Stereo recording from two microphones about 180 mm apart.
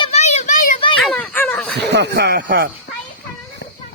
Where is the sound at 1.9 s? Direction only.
65° right (ahead or behind).